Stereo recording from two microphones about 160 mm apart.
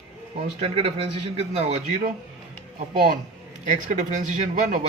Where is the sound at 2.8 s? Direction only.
55° right (ahead or behind).